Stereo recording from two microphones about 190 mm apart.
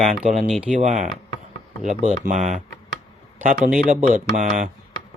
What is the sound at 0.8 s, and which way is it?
Speech, 40° right (ahead or behind).